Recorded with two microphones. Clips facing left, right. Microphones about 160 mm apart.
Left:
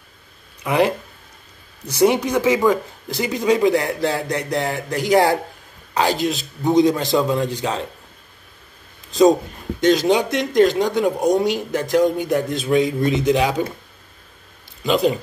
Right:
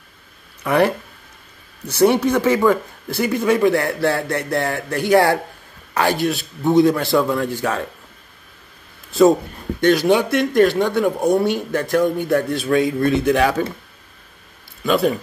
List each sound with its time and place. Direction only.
0.7 s a man's voice: 15° left (ahead or behind)
9.8 s speech: 20° left (ahead or behind)
14.9 s speech: 20° left (ahead or behind)